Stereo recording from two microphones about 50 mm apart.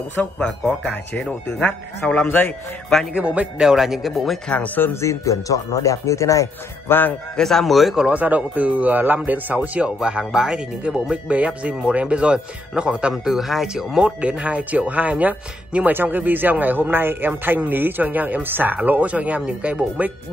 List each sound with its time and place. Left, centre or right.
0.4 s speech: centre
2.2 s a man's voice: left
3.2 s speech: right
3.6 s speech: centre
4.5 s speech: left
5.0 s speech: left
6.9 s a man's voice: left
7.3 s speech: centre
8.1 s speech: right
9.8 s speech: centre
13.1 s speech: centre
14.0 s speech: right
18.9 s speech: right